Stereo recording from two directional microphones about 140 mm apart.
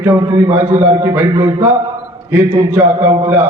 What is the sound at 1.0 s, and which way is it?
A man's voice, 15° right (ahead or behind).